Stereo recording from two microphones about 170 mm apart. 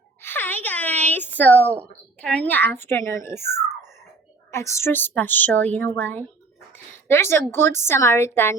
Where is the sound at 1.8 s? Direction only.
10° left (ahead or behind).